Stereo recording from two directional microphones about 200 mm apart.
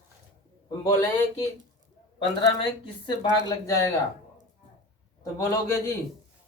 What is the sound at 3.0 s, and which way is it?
Speech, 20° left (ahead or behind).